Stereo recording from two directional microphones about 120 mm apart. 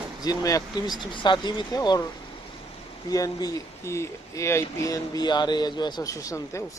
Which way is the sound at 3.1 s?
30° left (ahead or behind).